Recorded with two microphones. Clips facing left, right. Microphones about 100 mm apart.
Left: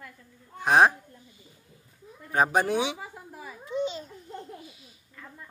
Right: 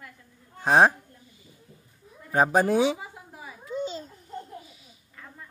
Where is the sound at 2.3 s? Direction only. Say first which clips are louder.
Right 3 dB; 35° right (ahead or behind).